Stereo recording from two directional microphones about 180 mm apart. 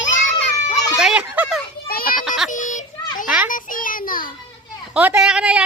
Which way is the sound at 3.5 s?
50° left (ahead or behind).